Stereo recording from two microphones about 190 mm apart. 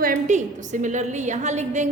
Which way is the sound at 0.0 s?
40° right (ahead or behind).